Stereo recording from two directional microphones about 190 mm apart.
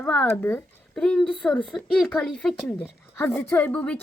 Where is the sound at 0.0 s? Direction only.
10° left (ahead or behind).